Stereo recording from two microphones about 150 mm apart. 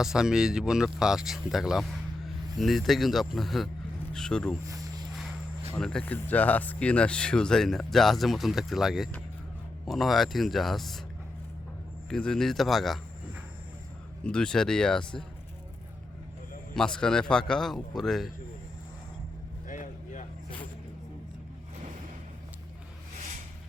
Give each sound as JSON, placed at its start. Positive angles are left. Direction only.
{"t": 0.0, "sound": "speech", "side_deg": -5}
{"t": 4.6, "sound": "a sound", "side_deg": -25}
{"t": 5.7, "sound": "speech", "side_deg": 5}
{"t": 12.0, "sound": "speech", "side_deg": 5}
{"t": 14.3, "sound": "speech", "side_deg": 5}
{"t": 16.7, "sound": "speech", "side_deg": 5}
{"t": 19.6, "sound": "vehicle", "side_deg": 60}